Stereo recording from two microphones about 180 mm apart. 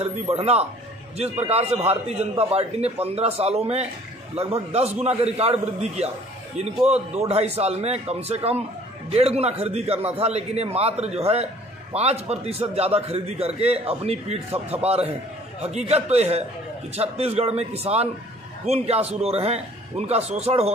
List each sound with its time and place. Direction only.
0.0 s a man's voice: 35° right (ahead or behind)